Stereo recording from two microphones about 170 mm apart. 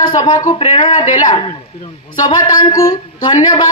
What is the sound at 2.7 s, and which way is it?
Speech, 15° left (ahead or behind).